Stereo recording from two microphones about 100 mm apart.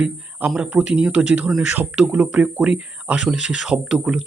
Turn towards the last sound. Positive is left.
turn(degrees=-10)  # may be behind; listen again after turning